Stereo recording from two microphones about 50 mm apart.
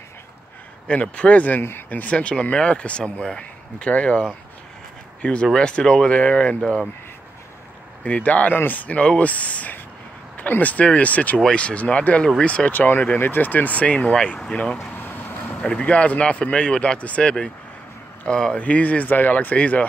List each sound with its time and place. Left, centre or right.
0.8 s speech: left
2.1 s speech: left
5.2 s speech: left
8.0 s speech: left
12.7 s speech: left
14.1 s speech: centre
14.9 s vehicle: left
15.5 s speech: left
18.6 s speech: left